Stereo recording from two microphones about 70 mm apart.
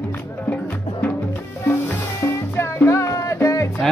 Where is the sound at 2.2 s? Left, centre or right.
Left.